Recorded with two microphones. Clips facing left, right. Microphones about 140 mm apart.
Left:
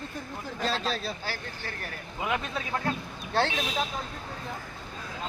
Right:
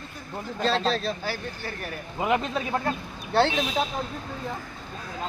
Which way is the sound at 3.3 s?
15° right (ahead or behind).